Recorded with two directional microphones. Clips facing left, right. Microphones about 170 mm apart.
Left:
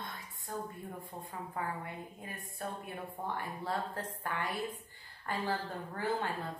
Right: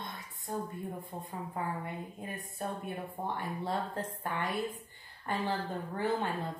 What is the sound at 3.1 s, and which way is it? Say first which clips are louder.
Speech: even; 20° right (ahead or behind).